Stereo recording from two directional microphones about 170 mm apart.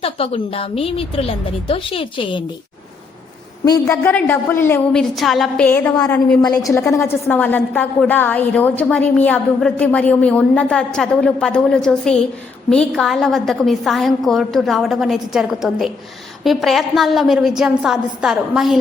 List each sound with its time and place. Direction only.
0.0 s a woman's voice: 35° left (ahead or behind)
3.7 s a woman's voice: 15° left (ahead or behind)
6.4 s a woman's voice: 20° left (ahead or behind); by 18.8 s centre (ahead or behind)